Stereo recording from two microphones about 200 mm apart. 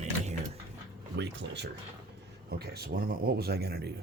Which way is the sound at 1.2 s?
60° right (ahead or behind).